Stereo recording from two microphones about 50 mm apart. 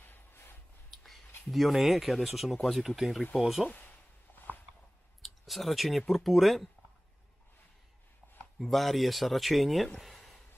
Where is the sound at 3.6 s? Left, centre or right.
Left.